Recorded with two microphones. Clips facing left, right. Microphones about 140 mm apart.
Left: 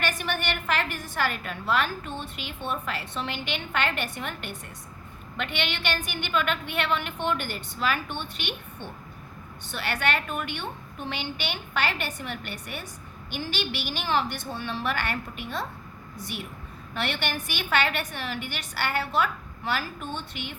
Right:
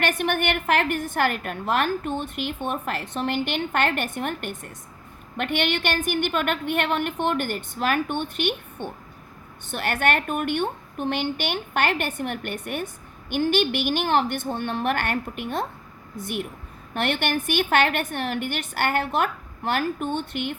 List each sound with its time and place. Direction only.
0.0 s a woman's voice: 55° right (ahead or behind)